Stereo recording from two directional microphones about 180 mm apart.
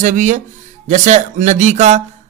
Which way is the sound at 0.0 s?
45° right (ahead or behind).